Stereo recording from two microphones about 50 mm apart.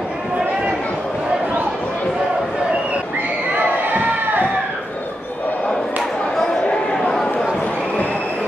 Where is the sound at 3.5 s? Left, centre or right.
Right.